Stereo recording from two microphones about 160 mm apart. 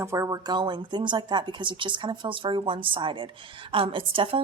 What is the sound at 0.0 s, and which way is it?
A woman's voice, 20° right (ahead or behind).